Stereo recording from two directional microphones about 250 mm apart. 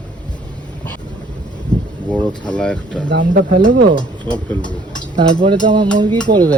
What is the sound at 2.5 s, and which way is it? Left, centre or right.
Speech, centre.